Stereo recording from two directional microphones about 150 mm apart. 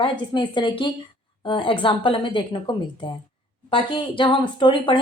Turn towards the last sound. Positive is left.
turn(degrees=35)  # may be behind; listen again after turning